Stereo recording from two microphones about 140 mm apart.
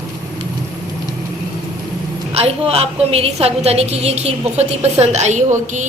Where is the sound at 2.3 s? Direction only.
45° right (ahead or behind).